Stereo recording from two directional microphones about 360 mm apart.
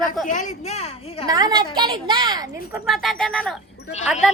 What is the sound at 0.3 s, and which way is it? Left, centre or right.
A woman's voice, left.